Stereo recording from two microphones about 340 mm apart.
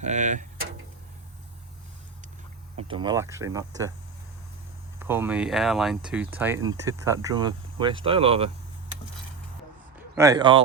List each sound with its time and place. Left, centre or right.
0.0 s speech: right
2.7 s speech: centre
4.9 s speech: centre
10.2 s speech: centre